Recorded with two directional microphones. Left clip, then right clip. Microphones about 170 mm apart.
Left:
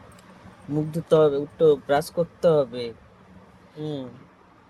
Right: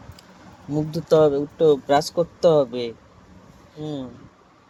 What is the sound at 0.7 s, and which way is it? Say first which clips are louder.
Speech: right 2 dB; 10° right (ahead or behind).